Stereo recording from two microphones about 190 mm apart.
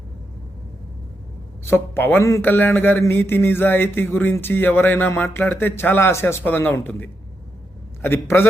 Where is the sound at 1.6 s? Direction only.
10° left (ahead or behind).